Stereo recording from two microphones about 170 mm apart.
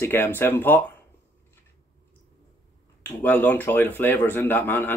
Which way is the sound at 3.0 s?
10° left (ahead or behind).